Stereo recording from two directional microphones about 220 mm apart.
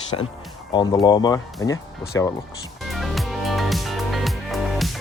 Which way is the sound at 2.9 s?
Centre (ahead or behind).